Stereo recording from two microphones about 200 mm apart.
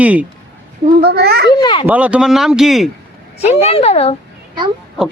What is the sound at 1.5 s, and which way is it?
Speech, 20° left (ahead or behind).